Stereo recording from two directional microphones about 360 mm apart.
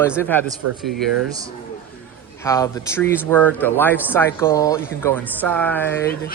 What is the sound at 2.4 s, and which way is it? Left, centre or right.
Speech, centre.